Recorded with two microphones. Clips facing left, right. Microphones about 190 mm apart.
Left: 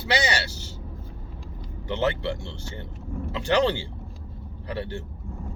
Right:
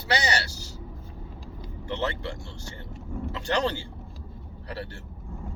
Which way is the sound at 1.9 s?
20° left (ahead or behind).